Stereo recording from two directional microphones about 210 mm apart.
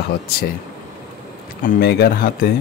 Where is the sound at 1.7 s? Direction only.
50° left (ahead or behind).